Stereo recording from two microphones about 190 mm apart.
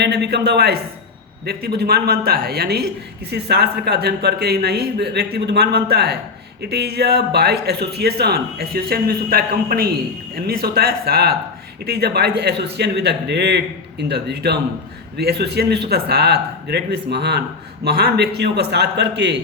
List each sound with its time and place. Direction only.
0.0 s speech: 60° right (ahead or behind)